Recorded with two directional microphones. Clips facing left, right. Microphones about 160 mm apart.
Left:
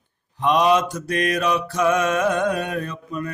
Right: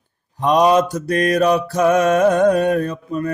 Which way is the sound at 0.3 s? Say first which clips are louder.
Right 4 dB; 40° right (ahead or behind).